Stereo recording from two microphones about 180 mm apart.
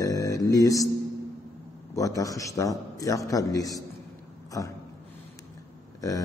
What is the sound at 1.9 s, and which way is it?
Speech, 20° left (ahead or behind).